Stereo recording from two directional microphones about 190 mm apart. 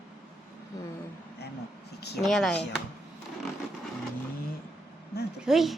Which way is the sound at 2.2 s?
Centre (ahead or behind).